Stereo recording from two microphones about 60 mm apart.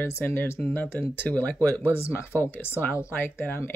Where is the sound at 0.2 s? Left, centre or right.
Left.